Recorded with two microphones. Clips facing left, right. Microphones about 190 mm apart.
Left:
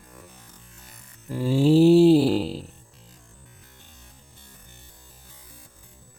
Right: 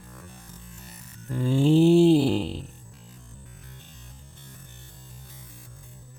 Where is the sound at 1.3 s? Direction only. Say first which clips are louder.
Left 2 dB; 5° left (ahead or behind).